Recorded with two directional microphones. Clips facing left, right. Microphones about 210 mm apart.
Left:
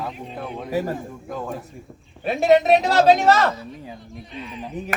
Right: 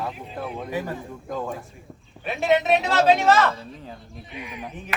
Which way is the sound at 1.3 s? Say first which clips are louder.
Right 1 dB; 5° left (ahead or behind).